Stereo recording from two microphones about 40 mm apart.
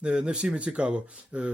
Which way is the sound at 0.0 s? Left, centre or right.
Right.